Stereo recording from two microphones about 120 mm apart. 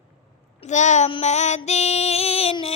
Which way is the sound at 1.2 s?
70° left (ahead or behind).